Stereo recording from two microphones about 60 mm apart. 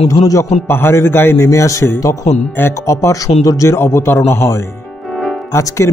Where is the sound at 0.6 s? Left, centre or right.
Left.